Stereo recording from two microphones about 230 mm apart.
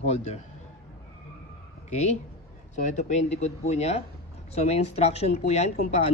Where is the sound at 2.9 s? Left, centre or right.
Left.